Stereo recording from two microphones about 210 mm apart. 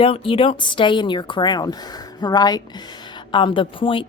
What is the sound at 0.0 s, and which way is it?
A woman's voice, 25° left (ahead or behind).